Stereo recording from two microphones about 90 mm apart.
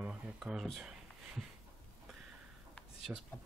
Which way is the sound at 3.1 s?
15° right (ahead or behind).